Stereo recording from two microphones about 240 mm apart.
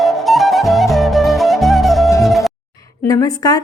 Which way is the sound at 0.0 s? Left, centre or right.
Centre.